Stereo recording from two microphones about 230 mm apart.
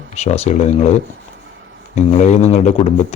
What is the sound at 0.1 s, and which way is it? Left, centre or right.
Speech, left.